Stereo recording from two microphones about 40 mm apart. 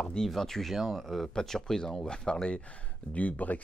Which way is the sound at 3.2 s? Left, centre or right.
Left.